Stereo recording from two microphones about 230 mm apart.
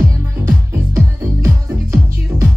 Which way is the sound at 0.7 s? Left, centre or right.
Centre.